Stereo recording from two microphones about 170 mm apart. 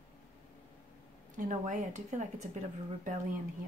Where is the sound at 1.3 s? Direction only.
50° right (ahead or behind).